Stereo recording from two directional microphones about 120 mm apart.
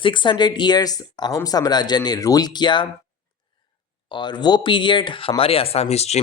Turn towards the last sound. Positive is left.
turn(degrees=60)  # may be behind; listen again after turning